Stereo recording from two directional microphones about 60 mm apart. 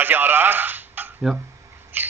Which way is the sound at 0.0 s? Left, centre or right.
Right.